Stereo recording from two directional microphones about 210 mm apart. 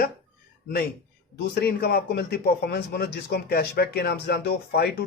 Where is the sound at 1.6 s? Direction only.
50° left (ahead or behind).